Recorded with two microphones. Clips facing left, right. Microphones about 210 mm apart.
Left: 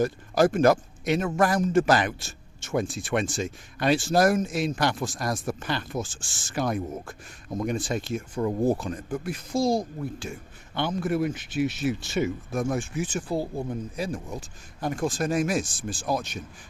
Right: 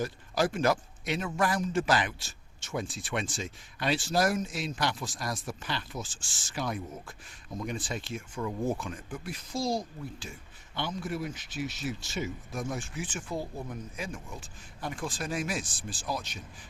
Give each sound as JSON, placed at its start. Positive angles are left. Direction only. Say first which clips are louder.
{"t": 0.0, "sound": "speech", "louder": "left 8 dB", "side_deg": 50}